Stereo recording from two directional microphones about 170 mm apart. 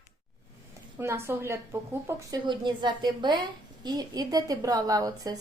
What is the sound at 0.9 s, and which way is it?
A woman's voice, 15° right (ahead or behind).